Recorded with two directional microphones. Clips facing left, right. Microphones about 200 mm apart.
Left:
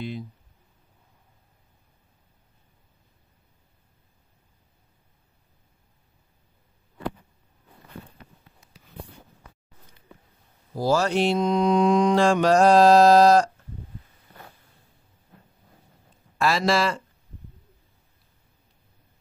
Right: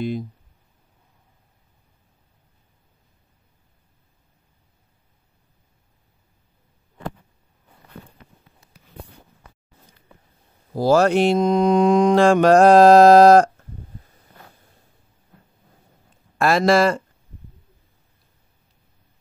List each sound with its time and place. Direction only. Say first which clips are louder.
10.7 s mantra: right 6 dB; 60° right (ahead or behind)
16.3 s speech: right 6 dB; 50° right (ahead or behind)